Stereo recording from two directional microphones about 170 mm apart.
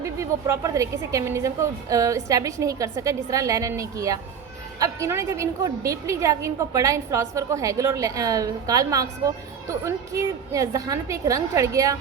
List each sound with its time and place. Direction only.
0.0 s a woman's voice: 15° right (ahead or behind)